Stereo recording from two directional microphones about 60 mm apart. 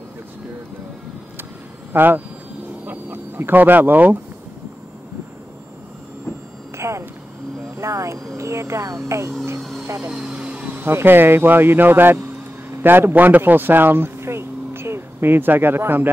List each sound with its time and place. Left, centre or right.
1.9 s speech: right
2.9 s a sound: right
6.8 s a sound: right
7.7 s vehicle: right
8.4 s speech: right
9.6 s vehicle: centre
10.1 s vehicle: centre
10.9 s speech: right